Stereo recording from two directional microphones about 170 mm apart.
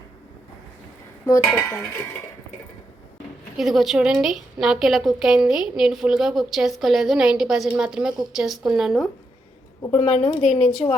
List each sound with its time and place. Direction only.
1.3 s cutlery: 15° left (ahead or behind)
3.6 s a woman's voice: centre (ahead or behind)
9.9 s a woman's voice: 40° left (ahead or behind)